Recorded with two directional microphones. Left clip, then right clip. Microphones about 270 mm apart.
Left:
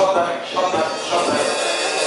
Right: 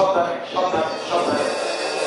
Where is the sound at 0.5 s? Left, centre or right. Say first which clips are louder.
Left 1 dB; centre.